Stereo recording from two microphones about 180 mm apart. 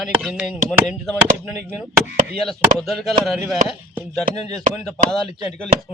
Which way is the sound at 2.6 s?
Centre (ahead or behind).